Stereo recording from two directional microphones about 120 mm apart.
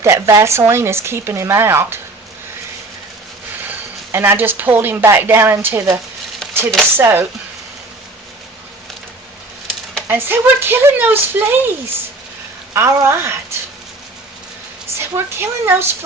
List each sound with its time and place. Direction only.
0.0 s speech: 25° right (ahead or behind)
4.1 s a woman's voice: 20° right (ahead or behind)
6.4 s chopping: 5° left (ahead or behind)
6.9 s speech: 20° right (ahead or behind)
10.1 s a woman's voice: 15° right (ahead or behind)
12.7 s speech: 20° right (ahead or behind)
14.9 s speech: 20° right (ahead or behind)